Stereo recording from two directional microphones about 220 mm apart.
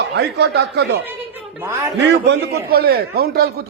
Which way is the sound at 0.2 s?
50° right (ahead or behind).